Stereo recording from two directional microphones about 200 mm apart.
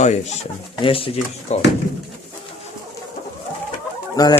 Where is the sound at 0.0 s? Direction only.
35° left (ahead or behind).